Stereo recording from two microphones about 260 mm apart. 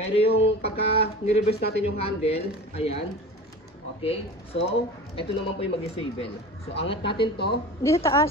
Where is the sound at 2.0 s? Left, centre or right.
Left.